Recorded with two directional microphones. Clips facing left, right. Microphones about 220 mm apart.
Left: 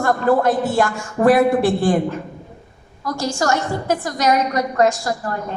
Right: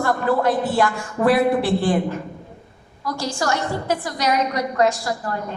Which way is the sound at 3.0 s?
45° left (ahead or behind).